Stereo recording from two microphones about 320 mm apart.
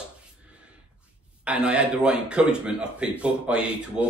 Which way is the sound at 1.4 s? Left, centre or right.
Centre.